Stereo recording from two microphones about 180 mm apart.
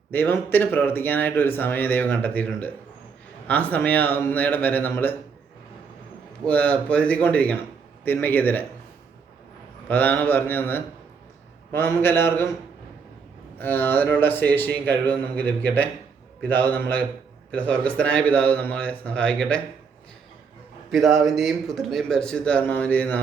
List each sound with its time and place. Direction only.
0.1 s speech: 10° left (ahead or behind)
6.4 s speech: 10° left (ahead or behind)
9.9 s speech: 10° left (ahead or behind)
13.6 s speech: 10° left (ahead or behind)
20.9 s a man's voice: centre (ahead or behind)